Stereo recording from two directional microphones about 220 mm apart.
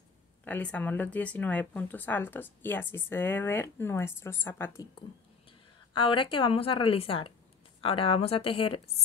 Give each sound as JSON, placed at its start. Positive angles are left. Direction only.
{"t": 0.5, "sound": "speech", "side_deg": 5}
{"t": 5.9, "sound": "a woman's voice", "side_deg": 25}